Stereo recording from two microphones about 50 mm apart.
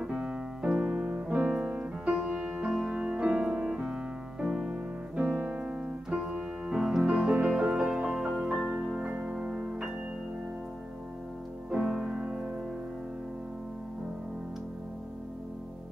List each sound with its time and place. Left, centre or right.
0.0 s piano: centre; by 1.7 s right
1.7 s music: centre
4.6 s music: right
6.0 s piano: centre
7.0 s music: centre
9.0 s music: right
11.8 s music: centre